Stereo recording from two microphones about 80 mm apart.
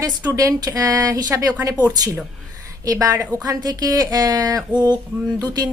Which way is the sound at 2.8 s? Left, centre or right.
Right.